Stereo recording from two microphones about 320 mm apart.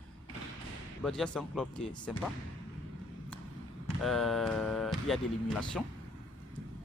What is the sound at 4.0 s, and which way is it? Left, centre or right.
Speech, centre.